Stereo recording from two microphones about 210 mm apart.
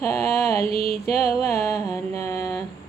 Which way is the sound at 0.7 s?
30° right (ahead or behind).